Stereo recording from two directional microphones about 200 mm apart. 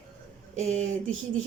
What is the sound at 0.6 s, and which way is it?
Speech, 35° right (ahead or behind).